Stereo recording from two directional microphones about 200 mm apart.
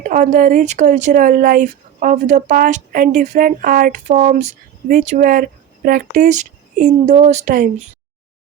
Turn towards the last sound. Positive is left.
turn(degrees=-45)  # may be behind; listen again after turning